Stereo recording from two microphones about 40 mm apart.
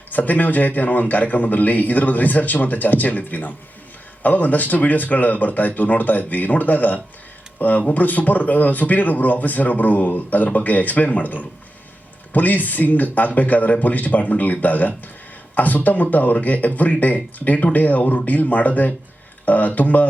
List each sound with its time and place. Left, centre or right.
0.1 s speech: left